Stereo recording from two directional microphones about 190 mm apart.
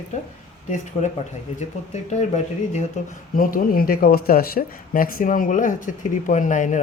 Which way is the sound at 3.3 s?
45° left (ahead or behind).